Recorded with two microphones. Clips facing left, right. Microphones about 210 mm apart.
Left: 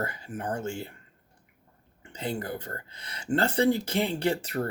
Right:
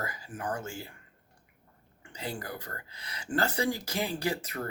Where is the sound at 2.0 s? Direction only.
25° left (ahead or behind).